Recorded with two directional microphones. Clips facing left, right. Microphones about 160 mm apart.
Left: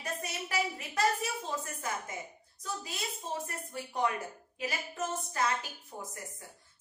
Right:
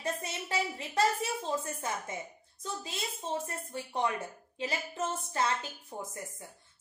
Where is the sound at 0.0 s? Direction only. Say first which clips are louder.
Right 2 dB; 25° right (ahead or behind).